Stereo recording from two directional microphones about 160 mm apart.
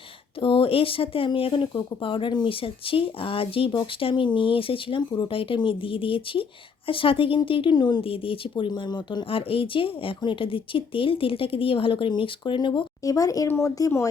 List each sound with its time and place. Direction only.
0.4 s speech: 35° left (ahead or behind)